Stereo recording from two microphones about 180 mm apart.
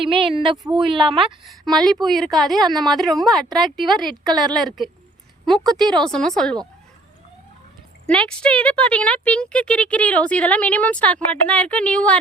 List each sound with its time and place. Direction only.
0.1 s speech: 30° right (ahead or behind)
1.6 s a woman's voice: 5° left (ahead or behind)
8.0 s speech: 5° left (ahead or behind)